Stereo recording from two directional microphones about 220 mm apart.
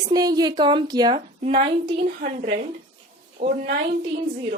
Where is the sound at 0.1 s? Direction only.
15° right (ahead or behind).